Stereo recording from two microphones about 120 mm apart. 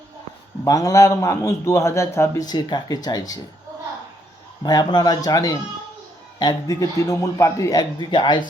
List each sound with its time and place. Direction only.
0.6 s a man's voice: 30° left (ahead or behind)
2.4 s a man's voice: 35° left (ahead or behind)
4.6 s a man's voice: 35° left (ahead or behind)